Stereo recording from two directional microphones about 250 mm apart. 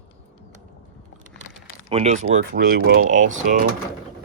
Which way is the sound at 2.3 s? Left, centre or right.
Right.